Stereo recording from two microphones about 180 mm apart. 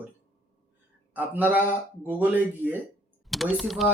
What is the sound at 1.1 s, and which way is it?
Speech, 10° right (ahead or behind).